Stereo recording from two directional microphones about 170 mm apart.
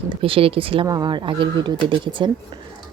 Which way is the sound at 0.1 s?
30° right (ahead or behind).